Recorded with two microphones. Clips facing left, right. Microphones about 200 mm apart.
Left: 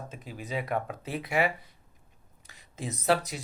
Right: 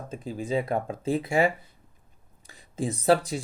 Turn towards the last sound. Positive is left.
turn(degrees=-30)  # may be behind; listen again after turning